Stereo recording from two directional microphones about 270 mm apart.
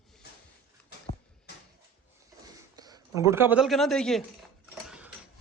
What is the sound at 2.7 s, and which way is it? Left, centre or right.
Speech, centre.